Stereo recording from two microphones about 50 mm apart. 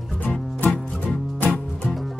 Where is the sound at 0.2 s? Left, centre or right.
Left.